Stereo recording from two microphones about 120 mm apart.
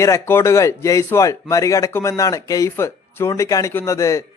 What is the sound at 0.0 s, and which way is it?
Speech, 25° left (ahead or behind).